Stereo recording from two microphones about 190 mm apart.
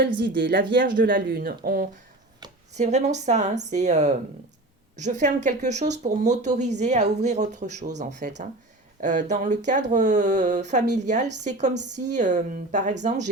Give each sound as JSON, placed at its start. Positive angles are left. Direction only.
{"t": 0.2, "sound": "speech", "side_deg": -60}
{"t": 1.1, "sound": "speech", "side_deg": -50}
{"t": 2.7, "sound": "speech", "side_deg": -35}
{"t": 11.7, "sound": "a woman's voice", "side_deg": -65}
{"t": 11.9, "sound": "speech", "side_deg": -40}